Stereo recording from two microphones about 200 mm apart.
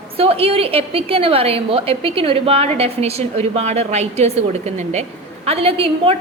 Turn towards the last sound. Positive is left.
turn(degrees=-30)  # may be behind; listen again after turning